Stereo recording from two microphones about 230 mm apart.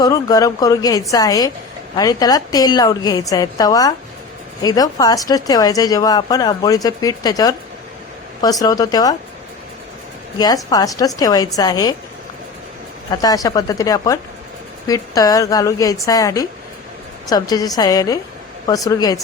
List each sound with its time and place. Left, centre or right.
0.0 s speech: centre
10.3 s speech: centre
13.1 s speech: centre